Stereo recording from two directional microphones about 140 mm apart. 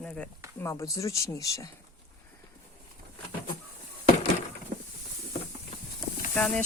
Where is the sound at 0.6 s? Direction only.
20° left (ahead or behind).